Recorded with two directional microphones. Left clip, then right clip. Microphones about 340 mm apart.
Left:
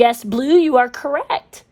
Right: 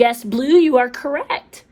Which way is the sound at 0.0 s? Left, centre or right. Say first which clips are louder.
Left 1 dB; centre.